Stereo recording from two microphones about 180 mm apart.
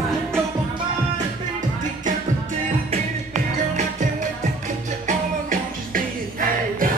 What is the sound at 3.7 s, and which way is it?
Music, 45° right (ahead or behind).